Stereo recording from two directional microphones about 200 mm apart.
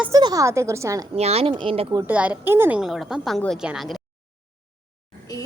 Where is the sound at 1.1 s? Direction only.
30° right (ahead or behind).